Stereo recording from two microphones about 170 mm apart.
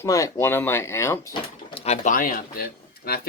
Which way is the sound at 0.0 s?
15° left (ahead or behind).